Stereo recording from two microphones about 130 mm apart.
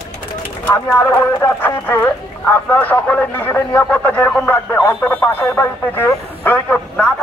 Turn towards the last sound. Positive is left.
turn(degrees=10)  # may be behind; listen again after turning